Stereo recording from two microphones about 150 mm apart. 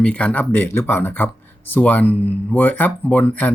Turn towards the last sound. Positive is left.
turn(degrees=10)  # may be behind; listen again after turning